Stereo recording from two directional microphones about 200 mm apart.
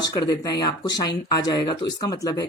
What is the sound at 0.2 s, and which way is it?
Speech, 20° left (ahead or behind).